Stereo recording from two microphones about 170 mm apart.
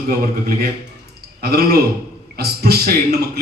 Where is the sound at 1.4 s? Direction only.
65° right (ahead or behind).